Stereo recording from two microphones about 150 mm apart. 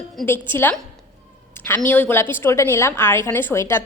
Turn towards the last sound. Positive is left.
turn(degrees=15)  # may be behind; listen again after turning